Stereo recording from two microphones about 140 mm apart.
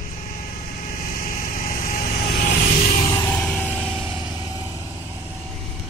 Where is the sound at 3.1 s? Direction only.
20° left (ahead or behind).